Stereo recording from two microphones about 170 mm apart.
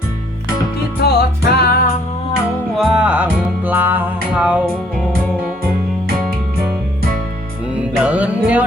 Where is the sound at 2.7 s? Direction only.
5° right (ahead or behind).